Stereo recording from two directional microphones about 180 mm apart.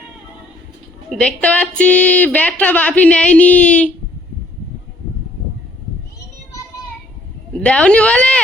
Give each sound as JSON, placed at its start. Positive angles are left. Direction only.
{"t": 1.1, "sound": "speech", "side_deg": 5}
{"t": 7.6, "sound": "speech", "side_deg": 5}